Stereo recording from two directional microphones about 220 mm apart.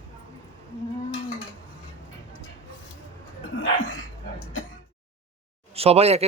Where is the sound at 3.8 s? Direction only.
65° left (ahead or behind).